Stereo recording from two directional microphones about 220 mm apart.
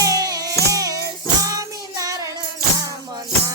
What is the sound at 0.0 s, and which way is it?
Music, 15° right (ahead or behind).